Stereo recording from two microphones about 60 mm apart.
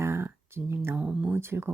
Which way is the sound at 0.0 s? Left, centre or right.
Right.